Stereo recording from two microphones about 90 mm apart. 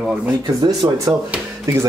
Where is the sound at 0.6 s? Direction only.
55° right (ahead or behind).